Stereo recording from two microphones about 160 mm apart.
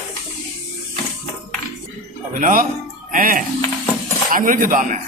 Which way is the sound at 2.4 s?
60° right (ahead or behind).